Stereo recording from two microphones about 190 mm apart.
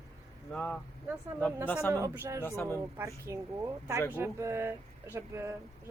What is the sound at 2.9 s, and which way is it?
Speech, 15° right (ahead or behind).